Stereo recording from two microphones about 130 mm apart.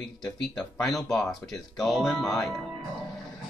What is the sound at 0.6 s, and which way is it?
Speech, centre (ahead or behind).